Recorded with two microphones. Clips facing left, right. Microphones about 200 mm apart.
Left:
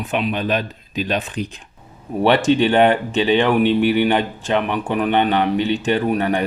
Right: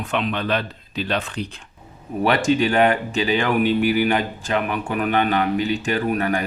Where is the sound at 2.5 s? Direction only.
30° left (ahead or behind).